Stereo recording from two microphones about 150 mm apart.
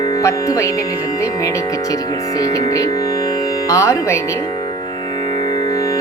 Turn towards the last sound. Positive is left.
turn(degrees=20)  # may be behind; listen again after turning